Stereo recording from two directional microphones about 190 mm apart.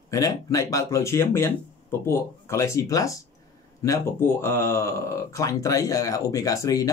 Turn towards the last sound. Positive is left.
turn(degrees=20)  # may be behind; listen again after turning